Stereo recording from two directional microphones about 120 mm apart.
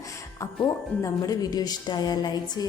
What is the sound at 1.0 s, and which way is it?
A woman's voice, 30° left (ahead or behind).